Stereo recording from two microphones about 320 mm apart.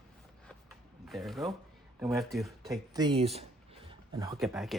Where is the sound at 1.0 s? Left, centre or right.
Centre.